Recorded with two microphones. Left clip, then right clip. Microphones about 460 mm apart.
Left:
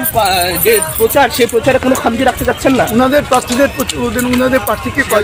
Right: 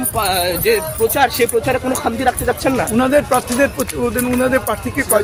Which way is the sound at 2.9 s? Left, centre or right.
Right.